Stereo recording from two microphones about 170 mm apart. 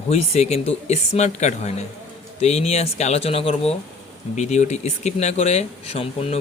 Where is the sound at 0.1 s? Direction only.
40° left (ahead or behind).